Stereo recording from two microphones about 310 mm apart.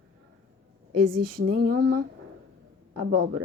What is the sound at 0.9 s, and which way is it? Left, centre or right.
Speech, right.